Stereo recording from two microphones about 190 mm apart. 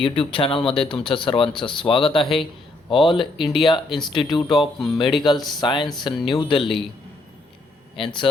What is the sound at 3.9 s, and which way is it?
Speech, 25° left (ahead or behind).